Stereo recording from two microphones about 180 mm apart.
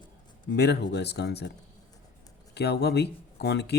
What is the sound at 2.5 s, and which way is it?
Speech, 65° left (ahead or behind).